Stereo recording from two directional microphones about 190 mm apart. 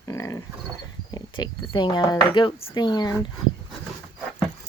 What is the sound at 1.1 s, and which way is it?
Speech, 20° left (ahead or behind).